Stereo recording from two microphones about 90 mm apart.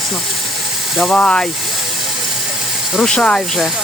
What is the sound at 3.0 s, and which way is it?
Speech, 10° left (ahead or behind).